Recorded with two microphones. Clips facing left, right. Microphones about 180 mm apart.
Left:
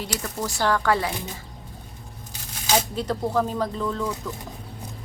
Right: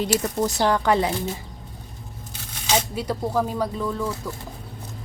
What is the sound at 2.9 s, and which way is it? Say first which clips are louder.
A woman's voice: even; 10° right (ahead or behind).